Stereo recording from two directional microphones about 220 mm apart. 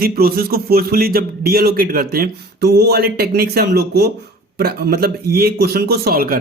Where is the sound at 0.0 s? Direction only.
45° right (ahead or behind).